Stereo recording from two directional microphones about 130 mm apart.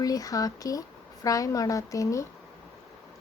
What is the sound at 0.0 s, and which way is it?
Speech, 30° left (ahead or behind).